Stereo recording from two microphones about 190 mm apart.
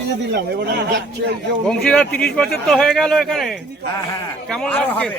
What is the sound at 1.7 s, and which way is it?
A man's voice, 5° left (ahead or behind).